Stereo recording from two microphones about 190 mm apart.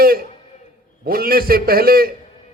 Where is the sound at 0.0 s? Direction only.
50° right (ahead or behind).